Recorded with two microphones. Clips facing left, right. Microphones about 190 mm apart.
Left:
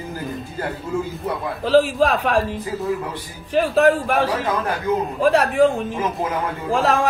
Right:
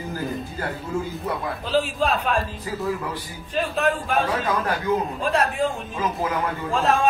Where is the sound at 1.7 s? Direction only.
85° left.